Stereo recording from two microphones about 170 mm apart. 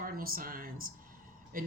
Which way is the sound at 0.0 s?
60° right (ahead or behind).